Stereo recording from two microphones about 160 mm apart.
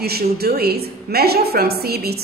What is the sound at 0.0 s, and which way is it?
A woman's voice, 80° right.